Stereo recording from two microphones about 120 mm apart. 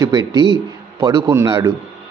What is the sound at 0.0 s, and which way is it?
Speech, 30° right (ahead or behind).